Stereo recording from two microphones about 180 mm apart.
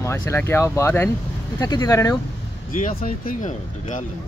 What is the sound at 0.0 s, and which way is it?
Speech, 15° left (ahead or behind).